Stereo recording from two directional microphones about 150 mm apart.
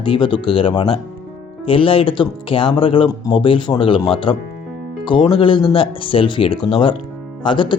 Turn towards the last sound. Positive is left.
turn(degrees=35)  # may be behind; listen again after turning